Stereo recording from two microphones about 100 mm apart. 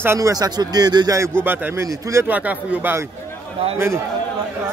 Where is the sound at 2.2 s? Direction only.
15° right (ahead or behind).